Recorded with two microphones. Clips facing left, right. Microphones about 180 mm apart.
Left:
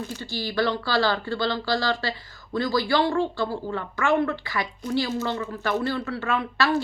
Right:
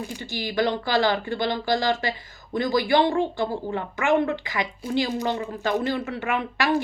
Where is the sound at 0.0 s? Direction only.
15° right (ahead or behind).